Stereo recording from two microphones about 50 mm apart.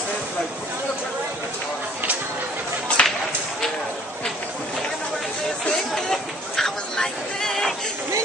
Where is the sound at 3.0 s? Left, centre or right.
Centre.